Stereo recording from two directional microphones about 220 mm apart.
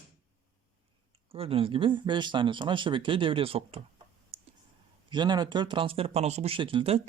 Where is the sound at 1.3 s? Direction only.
25° right (ahead or behind).